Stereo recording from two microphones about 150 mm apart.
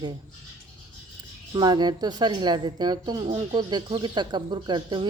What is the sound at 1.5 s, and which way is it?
Speech, 30° right (ahead or behind).